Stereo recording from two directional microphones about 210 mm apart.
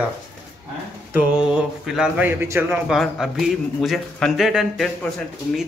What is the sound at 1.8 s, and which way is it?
A man's voice, 5° right (ahead or behind).